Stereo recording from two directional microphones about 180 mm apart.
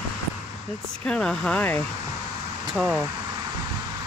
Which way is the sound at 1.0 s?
5° left (ahead or behind).